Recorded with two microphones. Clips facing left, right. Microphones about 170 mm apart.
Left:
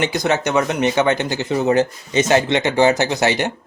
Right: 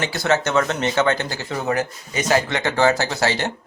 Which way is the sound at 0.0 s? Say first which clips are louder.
Left 2 dB; 15° left (ahead or behind).